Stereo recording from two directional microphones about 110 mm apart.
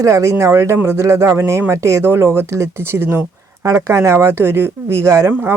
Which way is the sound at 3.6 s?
30° right (ahead or behind).